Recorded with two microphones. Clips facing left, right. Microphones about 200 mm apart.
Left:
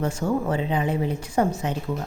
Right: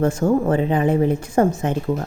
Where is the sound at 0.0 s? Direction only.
50° right (ahead or behind).